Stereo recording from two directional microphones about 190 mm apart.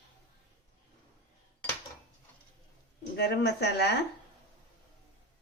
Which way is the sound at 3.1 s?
60° left (ahead or behind).